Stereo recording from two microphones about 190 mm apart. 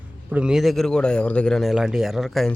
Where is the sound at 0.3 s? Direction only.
5° right (ahead or behind).